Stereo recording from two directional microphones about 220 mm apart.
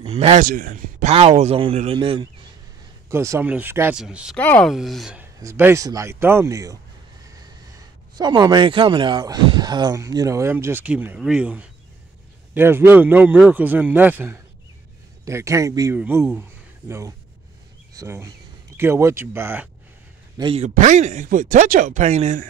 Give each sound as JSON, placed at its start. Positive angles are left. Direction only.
{"t": 0.0, "sound": "speech", "side_deg": -30}
{"t": 3.1, "sound": "speech", "side_deg": -10}
{"t": 5.4, "sound": "speech", "side_deg": -15}
{"t": 8.2, "sound": "speech", "side_deg": -20}
{"t": 16.3, "sound": "a sound", "side_deg": -10}
{"t": 17.9, "sound": "speech", "side_deg": -15}
{"t": 20.3, "sound": "speech", "side_deg": -25}